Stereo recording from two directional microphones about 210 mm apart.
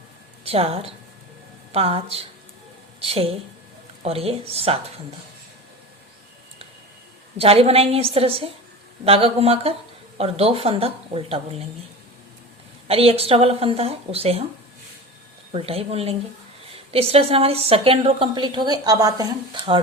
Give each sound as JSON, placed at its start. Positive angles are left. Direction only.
{"t": 0.4, "sound": "a woman's voice", "side_deg": -30}
{"t": 7.3, "sound": "a woman's voice", "side_deg": -30}
{"t": 12.9, "sound": "a woman's voice", "side_deg": -30}
{"t": 15.5, "sound": "a woman's voice", "side_deg": -30}